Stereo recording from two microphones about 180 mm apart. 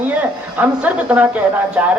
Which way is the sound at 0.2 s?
10° right (ahead or behind).